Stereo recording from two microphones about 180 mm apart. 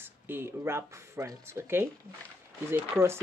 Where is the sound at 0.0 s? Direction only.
10° right (ahead or behind).